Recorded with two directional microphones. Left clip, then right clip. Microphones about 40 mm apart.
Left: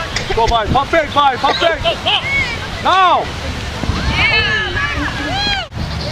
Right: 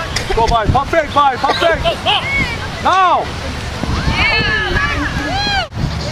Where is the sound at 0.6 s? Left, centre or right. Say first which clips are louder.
Even; right.